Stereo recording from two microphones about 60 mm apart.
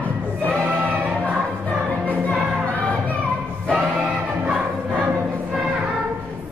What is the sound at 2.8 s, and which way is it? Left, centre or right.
Music, left.